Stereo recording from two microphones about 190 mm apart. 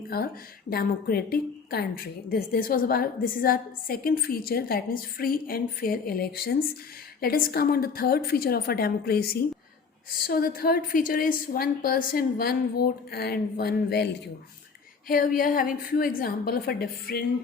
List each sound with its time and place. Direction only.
0.1 s a woman's voice: 55° left (ahead or behind)
15.0 s a woman's voice: 50° left (ahead or behind)